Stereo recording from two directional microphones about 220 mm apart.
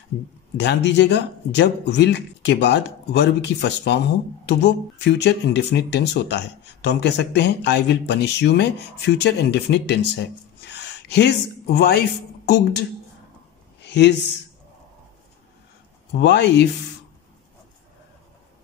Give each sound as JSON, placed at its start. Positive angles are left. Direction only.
{"t": 0.6, "sound": "speech", "side_deg": 50}
{"t": 10.7, "sound": "gasp", "side_deg": 50}
{"t": 12.4, "sound": "speech", "side_deg": 50}
{"t": 13.7, "sound": "a sound", "side_deg": 50}
{"t": 16.2, "sound": "speech", "side_deg": 50}